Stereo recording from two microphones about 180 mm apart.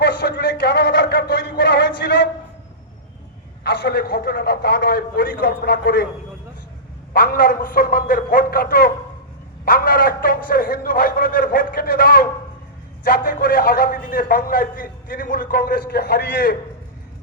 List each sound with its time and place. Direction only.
0.0 s a sound: 65° left (ahead or behind)
3.6 s a man's voice: 60° left (ahead or behind)
7.1 s a man's voice: 55° left (ahead or behind)